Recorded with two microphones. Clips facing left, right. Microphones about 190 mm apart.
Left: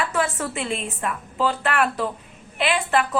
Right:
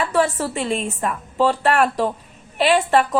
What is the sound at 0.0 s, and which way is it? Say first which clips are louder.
A woman's voice: right 5 dB; 40° right (ahead or behind).